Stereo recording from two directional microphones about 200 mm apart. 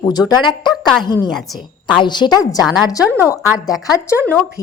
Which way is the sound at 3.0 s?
10° right (ahead or behind).